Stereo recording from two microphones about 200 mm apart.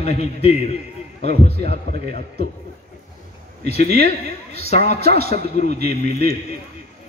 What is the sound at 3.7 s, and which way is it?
Speech, 50° right (ahead or behind).